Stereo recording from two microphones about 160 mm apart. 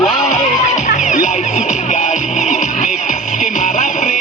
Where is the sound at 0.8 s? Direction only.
50° left (ahead or behind).